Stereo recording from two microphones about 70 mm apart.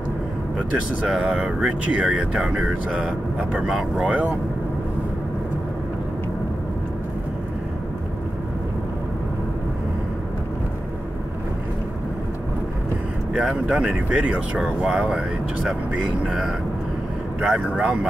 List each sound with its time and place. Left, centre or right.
1.0 s speech: centre
4.1 s speech: centre
13.3 s speech: centre